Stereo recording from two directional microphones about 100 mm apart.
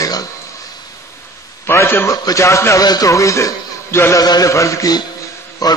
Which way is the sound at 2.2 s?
30° left (ahead or behind).